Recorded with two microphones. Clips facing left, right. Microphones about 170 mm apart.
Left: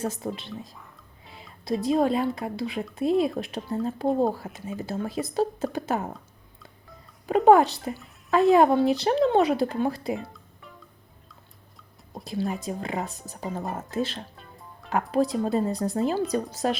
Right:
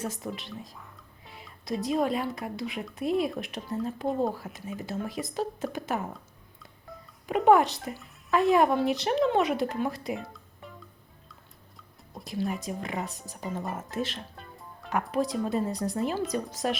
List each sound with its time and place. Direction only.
0.0 s a woman's voice: 30° left (ahead or behind)
1.3 s music: 25° left (ahead or behind)
1.8 s a woman's voice: 30° left (ahead or behind)
7.3 s speech: 40° left (ahead or behind)
12.1 s music: 30° left (ahead or behind)
12.5 s a woman's voice: 30° left (ahead or behind)